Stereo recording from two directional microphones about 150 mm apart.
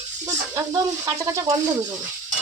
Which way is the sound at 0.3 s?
20° right (ahead or behind).